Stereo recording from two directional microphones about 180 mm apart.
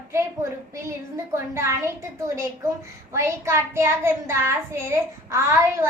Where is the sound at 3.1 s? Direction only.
15° right (ahead or behind).